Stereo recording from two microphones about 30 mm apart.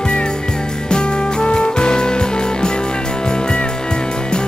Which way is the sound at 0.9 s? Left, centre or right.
Left.